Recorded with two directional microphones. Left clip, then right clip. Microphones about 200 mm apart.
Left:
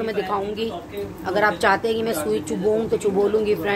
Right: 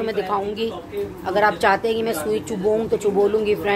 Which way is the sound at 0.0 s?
10° right (ahead or behind).